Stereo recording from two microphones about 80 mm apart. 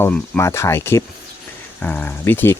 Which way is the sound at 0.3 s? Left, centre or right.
Left.